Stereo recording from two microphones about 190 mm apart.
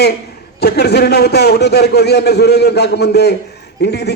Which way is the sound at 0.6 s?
60° left (ahead or behind).